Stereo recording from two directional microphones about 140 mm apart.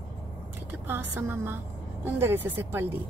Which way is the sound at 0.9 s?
15° right (ahead or behind).